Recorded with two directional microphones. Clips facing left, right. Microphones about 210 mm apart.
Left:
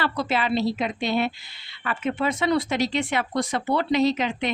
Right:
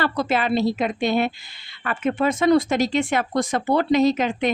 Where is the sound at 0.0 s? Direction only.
50° right (ahead or behind).